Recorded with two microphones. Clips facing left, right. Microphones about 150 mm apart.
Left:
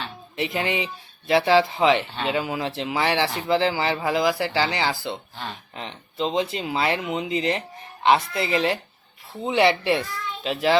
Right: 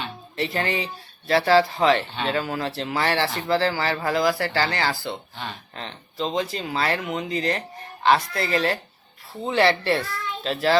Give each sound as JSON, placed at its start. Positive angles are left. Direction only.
{"t": 0.3, "sound": "speech", "side_deg": 15}